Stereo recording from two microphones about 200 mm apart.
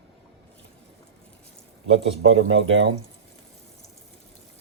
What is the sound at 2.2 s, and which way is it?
Speech, 75° right (ahead or behind).